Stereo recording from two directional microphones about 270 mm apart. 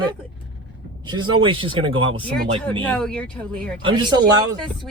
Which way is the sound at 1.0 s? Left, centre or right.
Centre.